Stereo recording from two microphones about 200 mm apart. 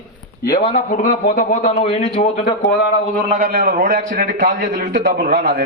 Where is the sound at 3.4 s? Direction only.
45° right (ahead or behind).